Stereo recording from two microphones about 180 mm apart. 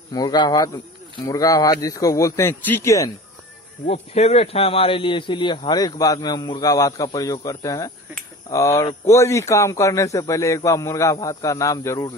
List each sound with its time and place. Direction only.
0.1 s a man's voice: 20° left (ahead or behind)
3.8 s a man's voice: 35° left (ahead or behind); by 12.1 s 15° left (ahead or behind)